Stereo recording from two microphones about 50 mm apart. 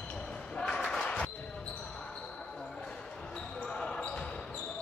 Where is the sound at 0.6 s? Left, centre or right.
Centre.